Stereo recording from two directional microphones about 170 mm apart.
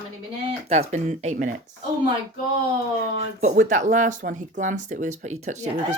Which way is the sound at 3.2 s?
45° right (ahead or behind).